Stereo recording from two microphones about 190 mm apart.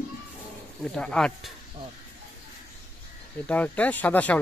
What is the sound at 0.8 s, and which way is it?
Speech, 5° left (ahead or behind).